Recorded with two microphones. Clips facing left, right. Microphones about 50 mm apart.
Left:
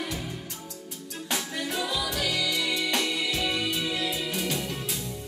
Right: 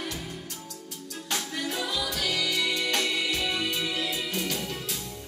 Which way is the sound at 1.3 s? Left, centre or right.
Centre.